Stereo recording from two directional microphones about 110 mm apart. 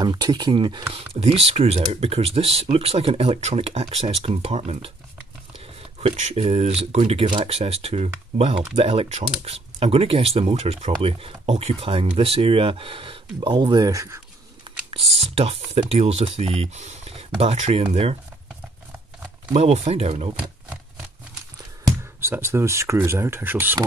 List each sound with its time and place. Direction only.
0.0 s speech: 40° right (ahead or behind)
0.9 s speech: 65° right (ahead or behind)
5.9 s speech: 70° right (ahead or behind)
7.2 s speech: 50° right (ahead or behind)
7.5 s speech: 65° right (ahead or behind)
11.0 s speech: 60° right (ahead or behind); by 14.2 s 30° right (ahead or behind)
14.9 s speech: 60° right (ahead or behind)
19.5 s speech: 85° right; by 20.2 s 65° right (ahead or behind)
21.8 s speech: 25° right (ahead or behind)